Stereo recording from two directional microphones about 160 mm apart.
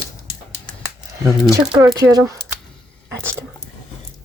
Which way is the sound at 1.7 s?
20° right (ahead or behind).